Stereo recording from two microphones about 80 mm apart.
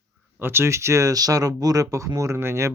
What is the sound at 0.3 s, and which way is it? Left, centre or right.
Speech, right.